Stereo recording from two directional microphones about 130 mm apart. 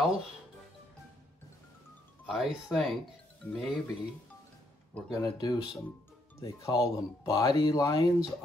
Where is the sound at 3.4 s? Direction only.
15° left (ahead or behind).